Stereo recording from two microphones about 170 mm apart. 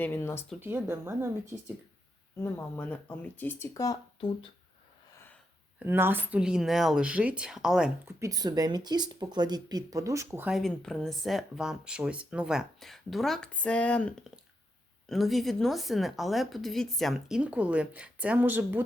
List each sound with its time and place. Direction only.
0.0 s speech: 15° left (ahead or behind)
0.6 s speech: 10° right (ahead or behind)
2.4 s speech: 15° left (ahead or behind)
5.1 s wheeze: 10° left (ahead or behind)
5.8 s speech: 10° right (ahead or behind)
8.2 s speech: 20° right (ahead or behind)
10.5 s speech: centre (ahead or behind)